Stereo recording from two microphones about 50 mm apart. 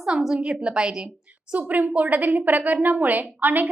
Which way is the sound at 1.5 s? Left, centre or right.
Right.